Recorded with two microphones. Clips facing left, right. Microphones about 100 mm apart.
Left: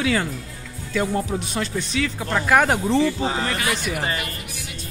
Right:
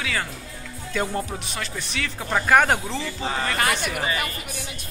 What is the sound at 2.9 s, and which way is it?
Speech, 20° left (ahead or behind).